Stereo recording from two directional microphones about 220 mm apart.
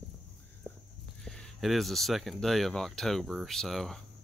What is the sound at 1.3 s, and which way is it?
Speech, centre (ahead or behind).